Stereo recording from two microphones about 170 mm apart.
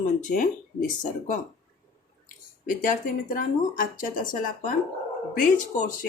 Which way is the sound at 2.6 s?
55° left (ahead or behind).